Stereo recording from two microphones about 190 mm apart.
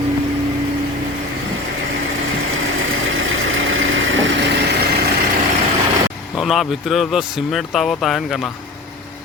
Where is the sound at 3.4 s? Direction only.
90° right.